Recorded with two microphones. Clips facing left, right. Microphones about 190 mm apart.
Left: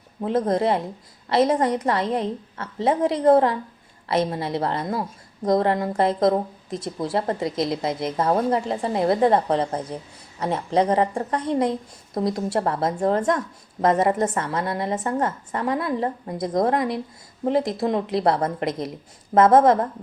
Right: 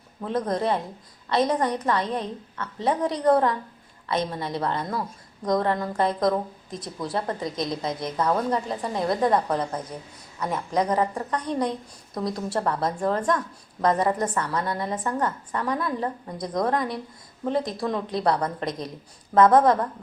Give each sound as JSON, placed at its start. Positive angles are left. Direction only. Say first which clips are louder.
{"t": 0.2, "sound": "a woman's voice", "louder": "left 4 dB", "side_deg": 25}